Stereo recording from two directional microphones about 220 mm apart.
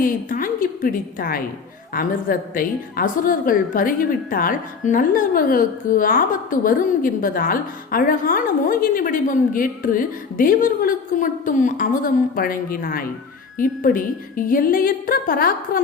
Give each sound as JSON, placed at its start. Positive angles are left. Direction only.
{"t": 0.0, "sound": "a woman's voice", "side_deg": 40}